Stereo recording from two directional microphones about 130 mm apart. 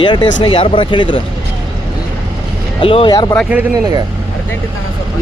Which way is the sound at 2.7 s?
40° left (ahead or behind).